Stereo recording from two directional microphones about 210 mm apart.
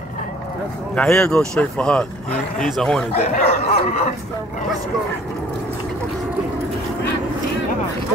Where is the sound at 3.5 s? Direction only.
30° left (ahead or behind).